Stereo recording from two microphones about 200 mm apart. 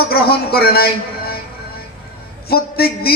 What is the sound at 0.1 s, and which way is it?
Speech, 50° left (ahead or behind).